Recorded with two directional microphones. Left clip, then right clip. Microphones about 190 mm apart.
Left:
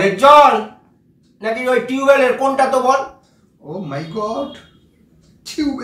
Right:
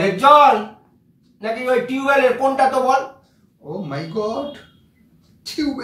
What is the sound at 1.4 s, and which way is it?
Speech, 20° left (ahead or behind).